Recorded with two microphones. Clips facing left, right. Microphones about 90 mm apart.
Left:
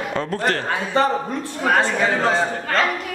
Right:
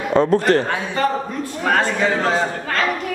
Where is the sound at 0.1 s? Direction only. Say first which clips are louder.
Right 13 dB; 25° right (ahead or behind).